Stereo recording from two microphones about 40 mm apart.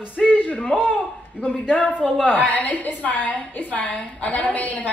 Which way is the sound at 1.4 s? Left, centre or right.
Left.